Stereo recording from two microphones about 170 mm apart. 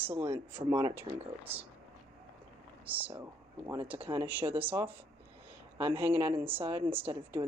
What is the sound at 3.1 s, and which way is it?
Speech, 20° right (ahead or behind).